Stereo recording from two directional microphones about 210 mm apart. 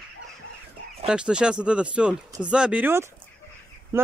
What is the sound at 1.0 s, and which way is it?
Speech, 5° right (ahead or behind).